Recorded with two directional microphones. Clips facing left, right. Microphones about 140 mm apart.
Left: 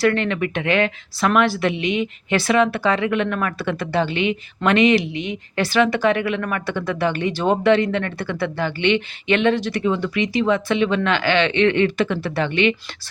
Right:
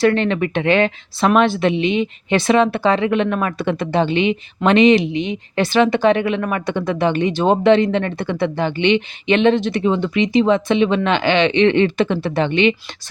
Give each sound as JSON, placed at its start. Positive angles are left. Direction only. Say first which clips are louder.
{"t": 0.0, "sound": "speech", "louder": "right 3 dB", "side_deg": -30}